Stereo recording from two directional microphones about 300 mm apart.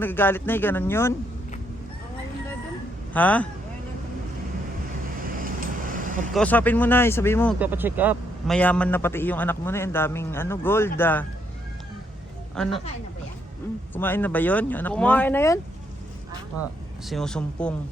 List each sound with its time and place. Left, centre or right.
0.0 s a man's voice: centre
3.1 s speech: centre
5.4 s vehicle: right
6.3 s a man's voice: centre
7.6 s a man's voice: centre
12.5 s speech: centre
13.9 s speech: centre
17.1 s speech: centre